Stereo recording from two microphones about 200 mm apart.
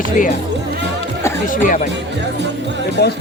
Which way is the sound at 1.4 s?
40° left (ahead or behind).